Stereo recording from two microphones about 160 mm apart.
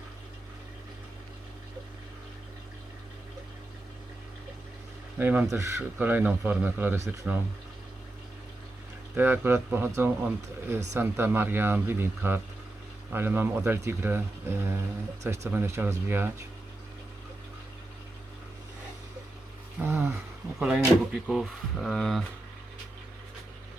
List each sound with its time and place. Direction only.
5.1 s speech: 10° right (ahead or behind)
9.1 s speech: 10° right (ahead or behind)
19.8 s speech: 15° right (ahead or behind)